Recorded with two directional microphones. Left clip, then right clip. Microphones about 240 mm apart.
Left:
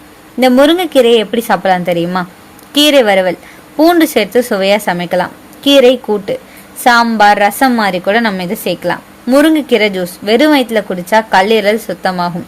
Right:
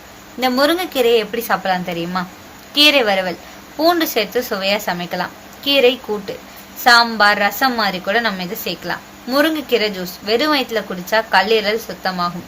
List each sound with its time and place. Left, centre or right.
0.3 s a woman's voice: left